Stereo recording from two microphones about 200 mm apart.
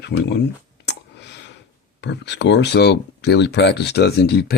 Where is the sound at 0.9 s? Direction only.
60° left (ahead or behind).